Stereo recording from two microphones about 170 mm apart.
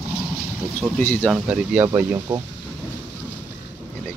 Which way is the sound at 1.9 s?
20° right (ahead or behind).